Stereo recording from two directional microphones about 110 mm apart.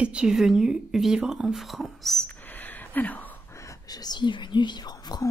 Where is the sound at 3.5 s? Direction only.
30° left (ahead or behind).